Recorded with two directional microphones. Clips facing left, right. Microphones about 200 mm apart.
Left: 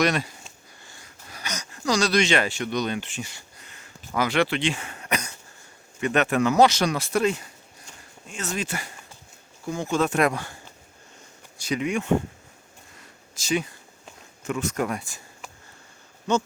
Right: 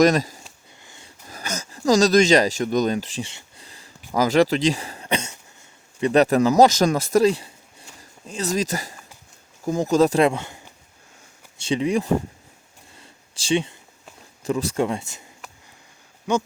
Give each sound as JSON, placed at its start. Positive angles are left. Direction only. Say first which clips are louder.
{"t": 0.0, "sound": "speech", "louder": "right 7 dB", "side_deg": -40}
{"t": 0.9, "sound": "dog", "louder": "right 3 dB", "side_deg": -20}
{"t": 1.3, "sound": "speech", "louder": "right 4 dB", "side_deg": -40}
{"t": 13.0, "sound": "a sound", "louder": "even", "side_deg": -30}
{"t": 14.4, "sound": "speech", "louder": "right 4 dB", "side_deg": -35}
{"t": 16.3, "sound": "speech", "louder": "right 1 dB", "side_deg": -10}